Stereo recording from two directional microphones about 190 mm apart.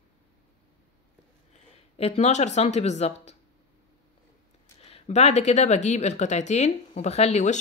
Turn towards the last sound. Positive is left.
turn(degrees=35)  # may be behind; listen again after turning